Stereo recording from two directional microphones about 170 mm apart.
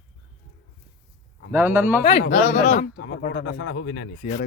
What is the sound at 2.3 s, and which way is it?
Speech, 45° left (ahead or behind).